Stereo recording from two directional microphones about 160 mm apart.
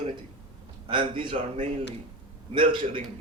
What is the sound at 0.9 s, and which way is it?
Speech, 30° right (ahead or behind).